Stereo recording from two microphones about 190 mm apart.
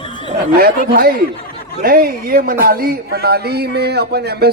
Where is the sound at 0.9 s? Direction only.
50° right (ahead or behind).